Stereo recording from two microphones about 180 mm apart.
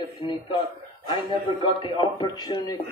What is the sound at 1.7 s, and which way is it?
Speech, 25° left (ahead or behind).